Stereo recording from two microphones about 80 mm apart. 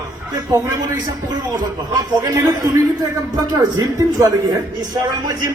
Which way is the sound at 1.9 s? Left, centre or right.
Right.